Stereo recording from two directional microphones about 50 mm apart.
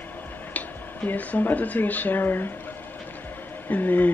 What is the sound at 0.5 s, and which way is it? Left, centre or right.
Speech, left.